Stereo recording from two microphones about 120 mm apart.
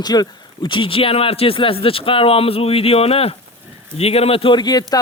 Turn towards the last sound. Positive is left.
turn(degrees=35)  # may be behind; listen again after turning